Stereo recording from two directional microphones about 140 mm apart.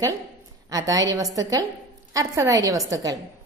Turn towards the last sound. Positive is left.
turn(degrees=-25)  # may be behind; listen again after turning